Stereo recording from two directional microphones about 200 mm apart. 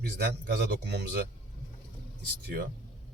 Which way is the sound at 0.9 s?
55° right (ahead or behind).